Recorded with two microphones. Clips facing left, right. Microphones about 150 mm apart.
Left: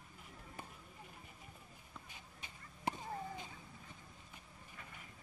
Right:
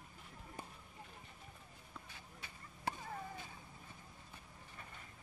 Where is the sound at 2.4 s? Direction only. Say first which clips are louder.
Left 2 dB; 20° left (ahead or behind).